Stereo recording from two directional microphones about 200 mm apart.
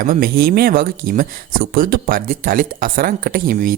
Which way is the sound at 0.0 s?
45° right (ahead or behind).